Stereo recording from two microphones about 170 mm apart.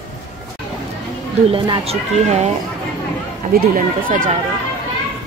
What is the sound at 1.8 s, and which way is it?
Speech, 40° right (ahead or behind).